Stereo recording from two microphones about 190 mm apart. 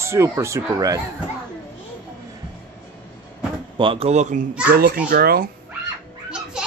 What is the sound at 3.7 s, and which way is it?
Speech, 30° right (ahead or behind).